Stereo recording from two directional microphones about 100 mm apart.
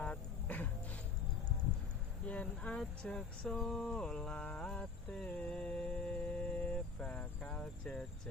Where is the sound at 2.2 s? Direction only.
15° left (ahead or behind).